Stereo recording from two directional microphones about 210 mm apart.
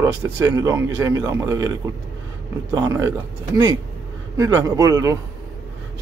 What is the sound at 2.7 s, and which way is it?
Speech, 15° right (ahead or behind).